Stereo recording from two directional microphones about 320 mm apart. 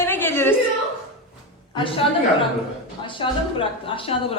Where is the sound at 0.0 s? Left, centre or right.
Centre.